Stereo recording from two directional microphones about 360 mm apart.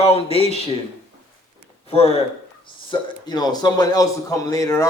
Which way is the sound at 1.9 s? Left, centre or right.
Centre.